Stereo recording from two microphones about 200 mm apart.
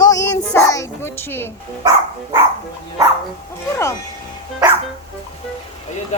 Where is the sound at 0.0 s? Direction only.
15° left (ahead or behind).